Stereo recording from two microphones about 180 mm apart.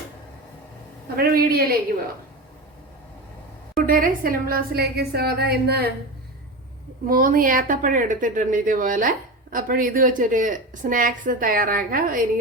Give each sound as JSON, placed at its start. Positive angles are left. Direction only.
{"t": 1.1, "sound": "a woman's voice", "side_deg": -55}
{"t": 3.8, "sound": "a woman's voice", "side_deg": -50}
{"t": 7.1, "sound": "a woman's voice", "side_deg": -50}